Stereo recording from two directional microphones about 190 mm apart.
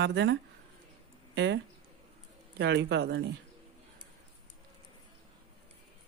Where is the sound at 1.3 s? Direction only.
65° right (ahead or behind).